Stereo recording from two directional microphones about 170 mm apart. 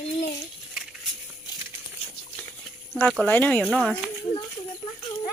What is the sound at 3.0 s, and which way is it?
Speech, 10° left (ahead or behind).